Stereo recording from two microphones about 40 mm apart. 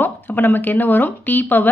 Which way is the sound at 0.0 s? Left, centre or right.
Left.